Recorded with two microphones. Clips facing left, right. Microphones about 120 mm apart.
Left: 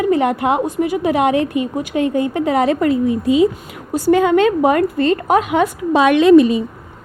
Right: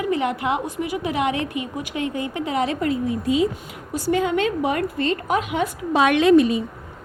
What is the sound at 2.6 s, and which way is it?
A woman's voice, 70° left (ahead or behind).